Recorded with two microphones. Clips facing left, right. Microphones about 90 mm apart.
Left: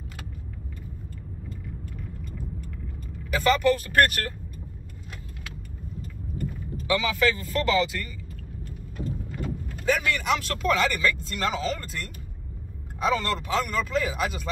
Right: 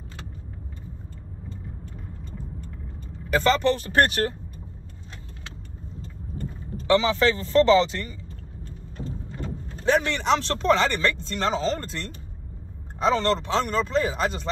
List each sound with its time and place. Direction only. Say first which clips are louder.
1.9 s vehicle: left 1 dB; 30° right (ahead or behind)
3.3 s speech: right 1 dB; 30° right (ahead or behind)
5.9 s vehicle: left 2 dB; 30° right (ahead or behind)
11.2 s speech: right 3 dB; 30° right (ahead or behind)